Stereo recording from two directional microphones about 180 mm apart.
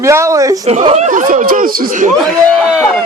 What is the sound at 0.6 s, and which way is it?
Speech, 35° right (ahead or behind).